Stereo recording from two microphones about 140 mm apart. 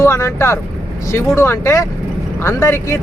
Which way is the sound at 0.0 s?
20° left (ahead or behind).